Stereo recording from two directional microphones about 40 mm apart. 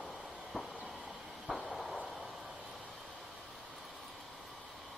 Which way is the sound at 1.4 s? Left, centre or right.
Centre.